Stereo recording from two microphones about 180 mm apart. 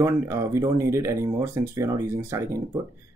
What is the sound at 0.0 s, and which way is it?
Speech, 15° right (ahead or behind).